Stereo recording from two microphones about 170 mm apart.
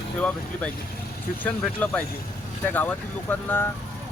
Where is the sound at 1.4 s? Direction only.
10° left (ahead or behind).